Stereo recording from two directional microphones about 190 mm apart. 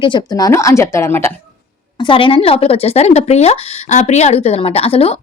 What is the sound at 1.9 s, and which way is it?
Speech, 25° left (ahead or behind).